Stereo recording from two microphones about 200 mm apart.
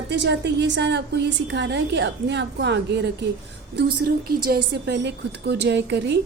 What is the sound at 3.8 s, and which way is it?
A woman's voice, 50° right (ahead or behind).